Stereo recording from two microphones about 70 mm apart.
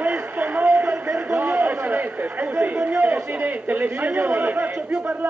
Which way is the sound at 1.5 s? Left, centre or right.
Right.